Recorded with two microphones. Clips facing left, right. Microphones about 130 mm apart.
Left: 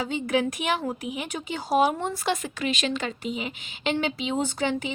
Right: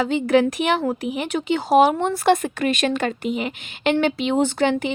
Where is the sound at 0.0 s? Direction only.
75° right (ahead or behind).